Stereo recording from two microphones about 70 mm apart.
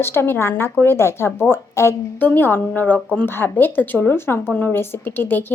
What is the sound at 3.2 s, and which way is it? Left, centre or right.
A woman's voice, left.